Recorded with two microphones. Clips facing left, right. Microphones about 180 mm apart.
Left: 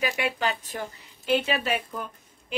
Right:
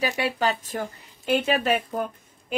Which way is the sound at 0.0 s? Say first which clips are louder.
Right 3 dB; 35° right (ahead or behind).